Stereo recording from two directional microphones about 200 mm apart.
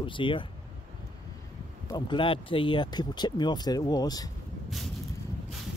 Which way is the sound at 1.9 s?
20° left (ahead or behind).